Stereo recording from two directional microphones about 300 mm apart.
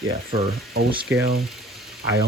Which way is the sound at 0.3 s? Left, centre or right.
Right.